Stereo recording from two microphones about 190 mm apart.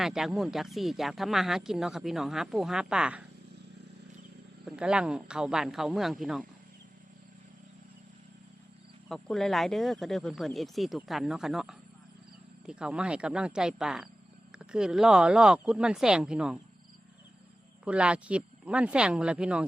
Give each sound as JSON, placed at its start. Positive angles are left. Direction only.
{"t": 0.0, "sound": "speech", "side_deg": 0}
{"t": 4.6, "sound": "speech", "side_deg": -5}
{"t": 9.0, "sound": "speech", "side_deg": 0}
{"t": 17.8, "sound": "speech", "side_deg": -5}